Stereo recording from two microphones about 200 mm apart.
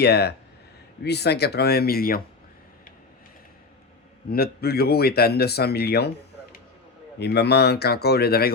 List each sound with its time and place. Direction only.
0.0 s speech: 55° left (ahead or behind)
4.3 s speech: 50° left (ahead or behind)
7.2 s speech: 55° left (ahead or behind)